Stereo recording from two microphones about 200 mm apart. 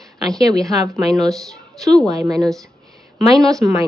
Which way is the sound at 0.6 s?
Centre (ahead or behind).